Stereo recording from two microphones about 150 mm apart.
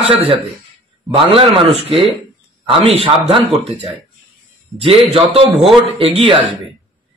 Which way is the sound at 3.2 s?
35° right (ahead or behind).